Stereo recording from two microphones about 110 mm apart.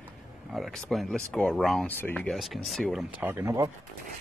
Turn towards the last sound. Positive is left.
turn(degrees=-20)  # may be behind; listen again after turning